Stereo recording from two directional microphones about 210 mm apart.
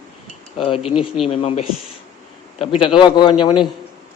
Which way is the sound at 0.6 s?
25° left (ahead or behind).